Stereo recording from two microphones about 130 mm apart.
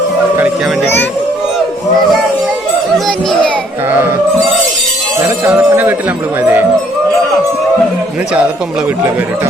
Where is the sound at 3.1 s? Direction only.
5° left (ahead or behind).